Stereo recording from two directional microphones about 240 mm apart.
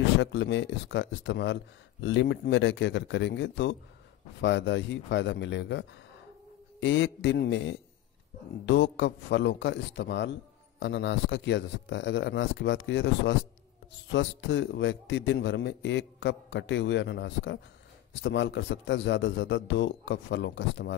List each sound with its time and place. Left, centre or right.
0.0 s a man's voice: left